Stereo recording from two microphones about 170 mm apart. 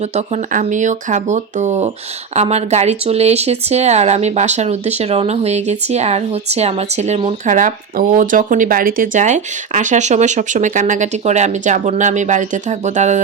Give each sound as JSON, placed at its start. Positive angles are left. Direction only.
{"t": 0.1, "sound": "speech", "side_deg": -40}